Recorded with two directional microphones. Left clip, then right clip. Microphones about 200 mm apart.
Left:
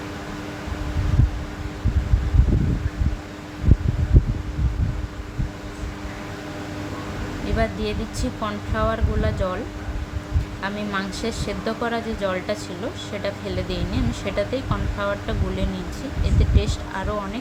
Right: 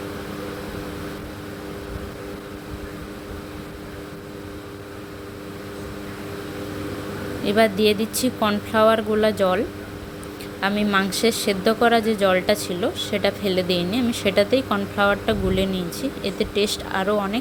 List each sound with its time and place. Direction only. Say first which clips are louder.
7.4 s speech: right 8 dB; 40° right (ahead or behind)
10.6 s speech: right 6 dB; 40° right (ahead or behind)